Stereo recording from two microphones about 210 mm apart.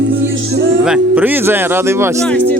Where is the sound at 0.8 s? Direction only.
5° right (ahead or behind).